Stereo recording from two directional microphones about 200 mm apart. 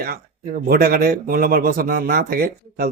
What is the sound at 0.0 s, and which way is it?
Speech, 45° right (ahead or behind).